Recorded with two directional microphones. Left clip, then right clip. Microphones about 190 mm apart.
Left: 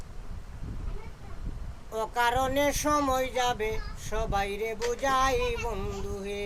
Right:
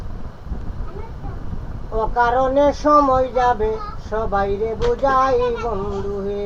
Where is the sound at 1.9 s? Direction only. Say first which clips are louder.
Right 9 dB; 20° left (ahead or behind).